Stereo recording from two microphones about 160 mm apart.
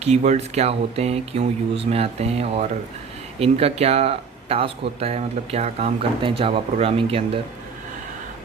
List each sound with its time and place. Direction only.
0.0 s speech: 45° right (ahead or behind)